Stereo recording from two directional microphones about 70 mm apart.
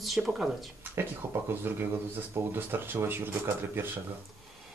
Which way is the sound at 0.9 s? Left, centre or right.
Right.